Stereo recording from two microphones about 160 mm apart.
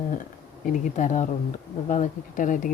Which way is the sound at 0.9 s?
50° left (ahead or behind).